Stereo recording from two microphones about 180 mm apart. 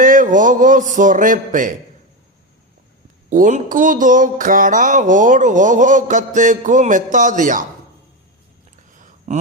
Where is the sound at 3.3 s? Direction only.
45° right (ahead or behind).